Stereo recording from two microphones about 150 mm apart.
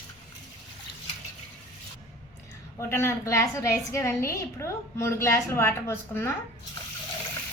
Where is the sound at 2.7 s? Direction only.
20° left (ahead or behind).